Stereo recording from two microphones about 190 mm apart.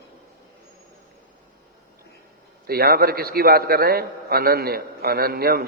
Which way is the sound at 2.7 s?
55° right (ahead or behind).